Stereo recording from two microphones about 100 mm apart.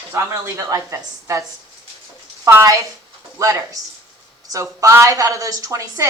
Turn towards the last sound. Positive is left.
turn(degrees=-30)  # may be behind; listen again after turning